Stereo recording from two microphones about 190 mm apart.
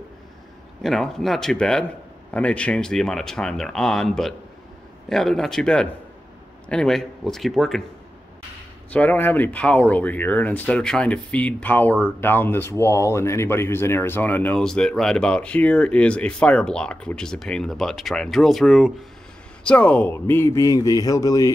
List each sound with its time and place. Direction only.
0.8 s speech: centre (ahead or behind)
8.9 s speech: 10° left (ahead or behind)